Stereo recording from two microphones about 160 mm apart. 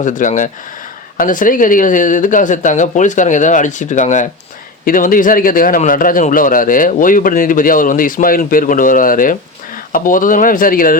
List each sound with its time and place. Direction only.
0.0 s a man's voice: 50° left (ahead or behind)